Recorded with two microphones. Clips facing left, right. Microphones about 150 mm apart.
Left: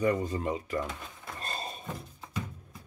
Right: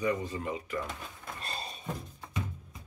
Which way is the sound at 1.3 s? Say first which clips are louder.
Left 3 dB; 40° left (ahead or behind).